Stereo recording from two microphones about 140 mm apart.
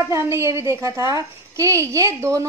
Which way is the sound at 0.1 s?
20° right (ahead or behind).